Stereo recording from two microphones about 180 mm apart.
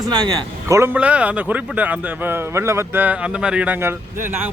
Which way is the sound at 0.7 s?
10° right (ahead or behind).